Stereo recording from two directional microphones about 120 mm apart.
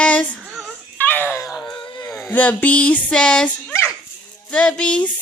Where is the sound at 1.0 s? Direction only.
15° left (ahead or behind).